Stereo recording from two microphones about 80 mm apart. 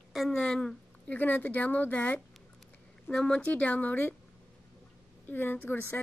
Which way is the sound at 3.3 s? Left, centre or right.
Centre.